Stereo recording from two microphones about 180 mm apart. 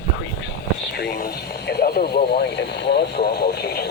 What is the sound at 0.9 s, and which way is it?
Speech, 60° left (ahead or behind).